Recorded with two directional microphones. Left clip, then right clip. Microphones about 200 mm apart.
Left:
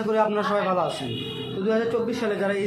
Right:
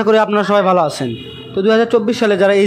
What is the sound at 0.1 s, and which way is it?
A man's voice, 45° right (ahead or behind).